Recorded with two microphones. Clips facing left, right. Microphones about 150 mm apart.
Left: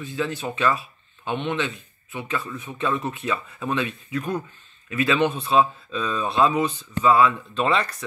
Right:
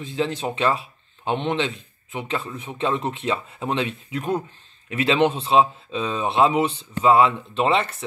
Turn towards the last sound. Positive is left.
turn(degrees=-20)  # may be behind; listen again after turning